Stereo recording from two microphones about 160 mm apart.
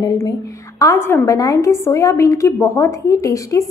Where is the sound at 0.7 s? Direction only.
15° left (ahead or behind).